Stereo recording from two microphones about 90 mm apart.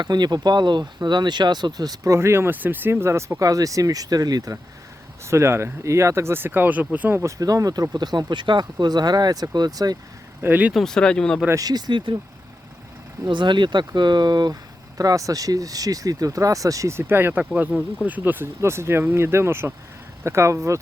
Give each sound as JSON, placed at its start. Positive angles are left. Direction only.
{"t": 0.0, "sound": "speech", "side_deg": -50}
{"t": 2.1, "sound": "speech", "side_deg": -30}
{"t": 5.2, "sound": "speech", "side_deg": -30}
{"t": 7.2, "sound": "speech", "side_deg": -35}
{"t": 10.4, "sound": "speech", "side_deg": -20}
{"t": 10.8, "sound": "speech", "side_deg": 5}
{"t": 11.6, "sound": "speech", "side_deg": -55}
{"t": 13.2, "sound": "speech", "side_deg": -60}
{"t": 17.0, "sound": "speech", "side_deg": -25}